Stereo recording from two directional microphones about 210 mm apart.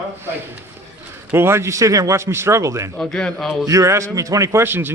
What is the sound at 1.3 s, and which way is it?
A man's voice, 10° right (ahead or behind).